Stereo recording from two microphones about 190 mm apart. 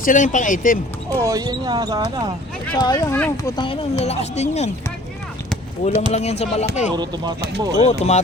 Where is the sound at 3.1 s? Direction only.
10° left (ahead or behind).